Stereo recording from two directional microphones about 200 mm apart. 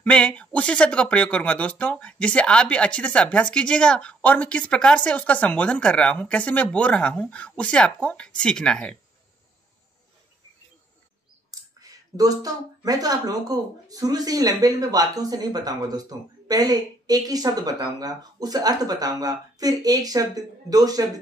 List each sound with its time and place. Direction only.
0.0 s speech: 5° left (ahead or behind)
11.8 s speech: 20° right (ahead or behind)